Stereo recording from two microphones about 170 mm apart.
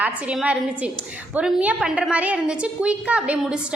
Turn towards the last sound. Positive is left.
turn(degrees=-5)  # may be behind; listen again after turning